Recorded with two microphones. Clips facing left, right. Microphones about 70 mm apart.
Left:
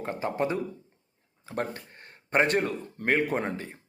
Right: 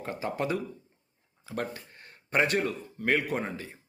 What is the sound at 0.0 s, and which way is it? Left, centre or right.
Speech, left.